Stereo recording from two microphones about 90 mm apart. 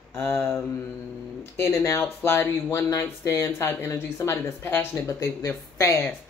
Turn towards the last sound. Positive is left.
turn(degrees=30)  # may be behind; listen again after turning